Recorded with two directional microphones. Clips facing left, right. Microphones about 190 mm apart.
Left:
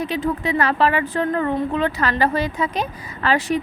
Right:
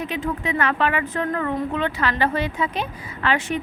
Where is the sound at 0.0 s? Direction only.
35° left (ahead or behind).